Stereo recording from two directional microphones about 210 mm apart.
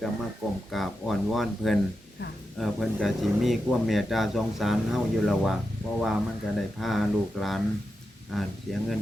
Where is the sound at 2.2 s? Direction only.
55° left (ahead or behind).